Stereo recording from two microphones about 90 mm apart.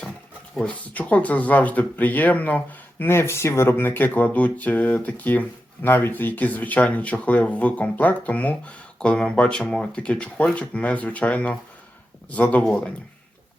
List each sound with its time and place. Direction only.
0.5 s speech: 15° left (ahead or behind)